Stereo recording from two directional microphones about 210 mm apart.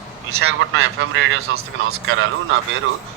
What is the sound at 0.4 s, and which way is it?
A man's voice, 65° right (ahead or behind).